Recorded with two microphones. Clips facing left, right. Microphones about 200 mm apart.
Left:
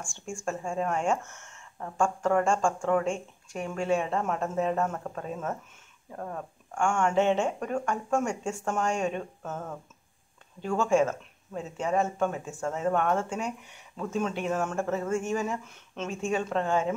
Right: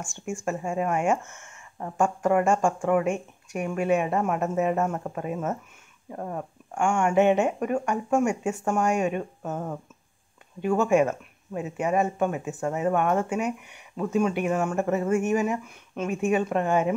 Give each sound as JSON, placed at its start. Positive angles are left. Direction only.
{"t": 0.0, "sound": "speech", "side_deg": -20}
{"t": 0.3, "sound": "speech", "side_deg": -5}
{"t": 1.2, "sound": "speech", "side_deg": -20}